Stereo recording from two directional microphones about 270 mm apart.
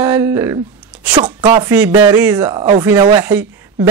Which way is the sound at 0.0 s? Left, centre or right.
Centre.